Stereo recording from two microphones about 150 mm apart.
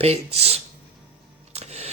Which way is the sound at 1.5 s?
45° right (ahead or behind).